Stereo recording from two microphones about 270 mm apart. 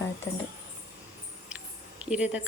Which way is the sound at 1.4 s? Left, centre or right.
Centre.